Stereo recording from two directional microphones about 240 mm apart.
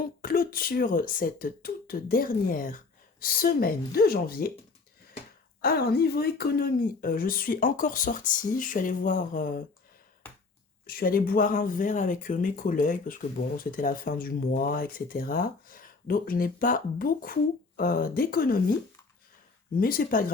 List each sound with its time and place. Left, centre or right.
0.0 s speech: left
5.6 s speech: left
10.8 s speech: left
19.7 s speech: left